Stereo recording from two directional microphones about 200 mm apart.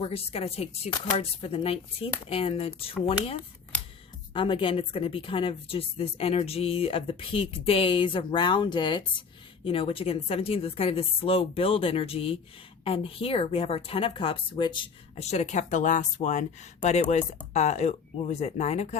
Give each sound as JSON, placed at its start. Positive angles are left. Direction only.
{"t": 0.0, "sound": "speech", "side_deg": 30}
{"t": 4.4, "sound": "speech", "side_deg": 25}